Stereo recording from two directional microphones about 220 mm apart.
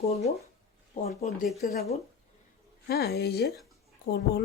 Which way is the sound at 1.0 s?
30° left (ahead or behind).